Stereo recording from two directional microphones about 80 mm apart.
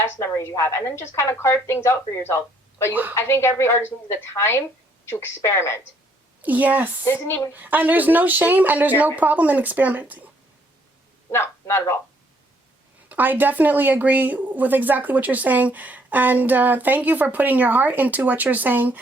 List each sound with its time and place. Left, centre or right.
0.0 s a woman's voice: left
2.9 s speech: right
3.2 s a woman's voice: left
6.4 s speech: centre
7.0 s speech: left
7.5 s speech: right
11.3 s a man's voice: left
13.1 s speech: right